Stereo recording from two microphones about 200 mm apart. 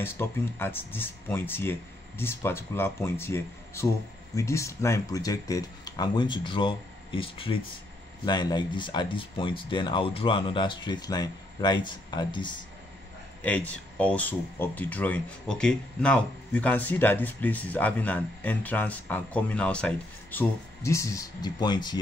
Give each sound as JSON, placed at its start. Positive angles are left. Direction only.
{"t": 0.0, "sound": "speech", "side_deg": 10}
{"t": 13.4, "sound": "speech", "side_deg": 5}